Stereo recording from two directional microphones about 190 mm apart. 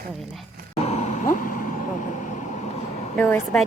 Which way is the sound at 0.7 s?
35° left (ahead or behind).